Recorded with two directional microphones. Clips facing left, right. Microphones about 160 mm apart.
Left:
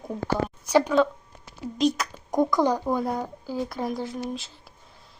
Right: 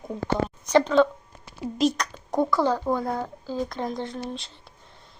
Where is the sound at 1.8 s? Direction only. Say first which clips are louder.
Even; centre (ahead or behind).